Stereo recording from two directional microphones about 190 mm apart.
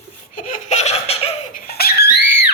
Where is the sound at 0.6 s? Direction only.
35° left (ahead or behind).